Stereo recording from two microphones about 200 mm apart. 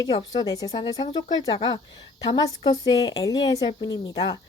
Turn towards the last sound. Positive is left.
turn(degrees=20)  # may be behind; listen again after turning